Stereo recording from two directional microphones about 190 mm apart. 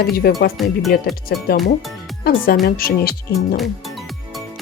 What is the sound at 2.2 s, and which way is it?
Speech, 50° left (ahead or behind).